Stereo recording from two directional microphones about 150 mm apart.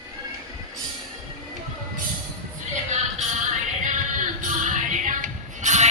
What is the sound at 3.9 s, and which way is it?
Music, 55° right (ahead or behind).